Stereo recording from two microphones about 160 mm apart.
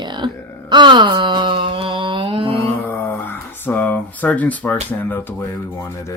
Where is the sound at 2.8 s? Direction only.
15° left (ahead or behind).